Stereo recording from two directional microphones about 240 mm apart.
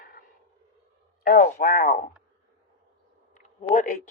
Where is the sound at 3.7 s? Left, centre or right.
Left.